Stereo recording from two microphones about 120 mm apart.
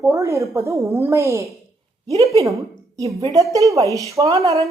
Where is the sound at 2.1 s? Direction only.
60° right (ahead or behind).